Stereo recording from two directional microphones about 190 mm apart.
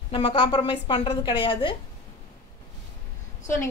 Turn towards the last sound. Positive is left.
turn(degrees=15)  # may be behind; listen again after turning